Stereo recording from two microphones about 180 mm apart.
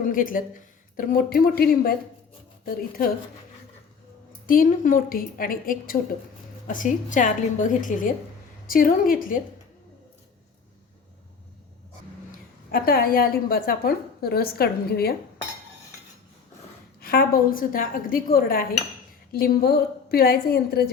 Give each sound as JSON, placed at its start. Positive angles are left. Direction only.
{"t": 0.0, "sound": "a woman's voice", "side_deg": 50}
{"t": 4.4, "sound": "a woman's voice", "side_deg": 50}
{"t": 12.3, "sound": "a woman's voice", "side_deg": 55}
{"t": 17.0, "sound": "a woman's voice", "side_deg": 55}